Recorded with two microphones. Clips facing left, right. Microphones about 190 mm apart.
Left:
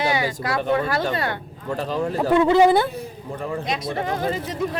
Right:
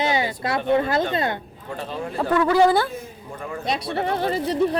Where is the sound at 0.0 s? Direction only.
25° right (ahead or behind).